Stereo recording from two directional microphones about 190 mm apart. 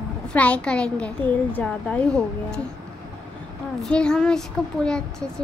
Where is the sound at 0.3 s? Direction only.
5° left (ahead or behind).